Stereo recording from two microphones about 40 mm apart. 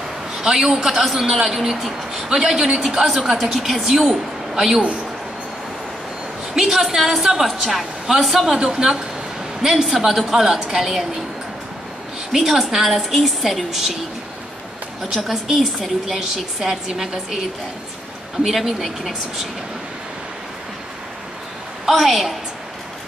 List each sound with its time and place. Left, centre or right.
0.4 s a woman's voice: centre
6.5 s a woman's voice: centre
8.5 s a woman's voice: centre
12.3 s a woman's voice: centre
15.2 s a woman's voice: centre
18.4 s a woman's voice: centre
21.8 s a woman's voice: centre